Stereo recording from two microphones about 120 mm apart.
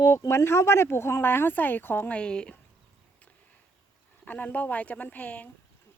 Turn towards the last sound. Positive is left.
turn(degrees=10)  # may be behind; listen again after turning